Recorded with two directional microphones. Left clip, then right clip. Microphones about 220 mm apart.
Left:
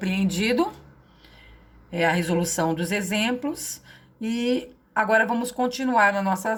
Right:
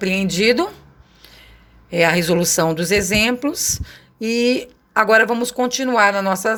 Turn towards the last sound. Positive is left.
turn(degrees=-40)  # may be behind; listen again after turning